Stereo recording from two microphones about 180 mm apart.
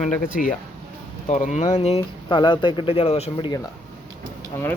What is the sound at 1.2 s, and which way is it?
Speech, 45° left (ahead or behind).